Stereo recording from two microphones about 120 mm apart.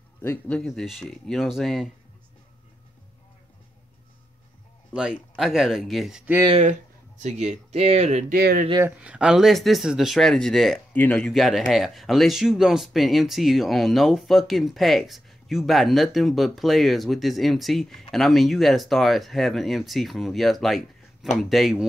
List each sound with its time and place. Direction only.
0.5 s speech: centre (ahead or behind)
5.3 s speech: 5° right (ahead or behind)
6.6 s speech: 80° right
9.0 s speech: 10° right (ahead or behind)
10.9 s speech: 15° left (ahead or behind)
11.2 s speech: centre (ahead or behind)